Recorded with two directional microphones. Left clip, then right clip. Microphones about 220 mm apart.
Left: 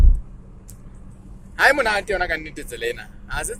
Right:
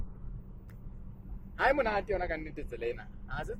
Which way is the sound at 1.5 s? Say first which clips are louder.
Left 11 dB; centre (ahead or behind).